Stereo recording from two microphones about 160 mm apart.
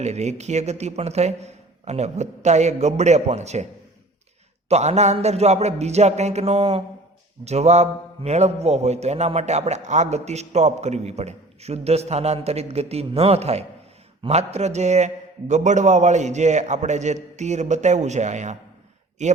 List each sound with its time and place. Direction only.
0.0 s a man's voice: 45° right (ahead or behind)
4.7 s a man's voice: 45° right (ahead or behind)